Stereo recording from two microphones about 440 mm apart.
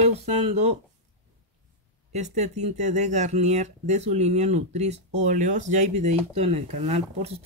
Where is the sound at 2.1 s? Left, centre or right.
Centre.